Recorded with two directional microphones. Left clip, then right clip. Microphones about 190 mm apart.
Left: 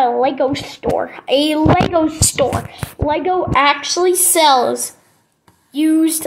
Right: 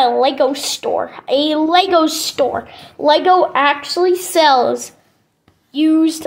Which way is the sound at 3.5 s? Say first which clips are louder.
Left 1 dB; 40° right (ahead or behind).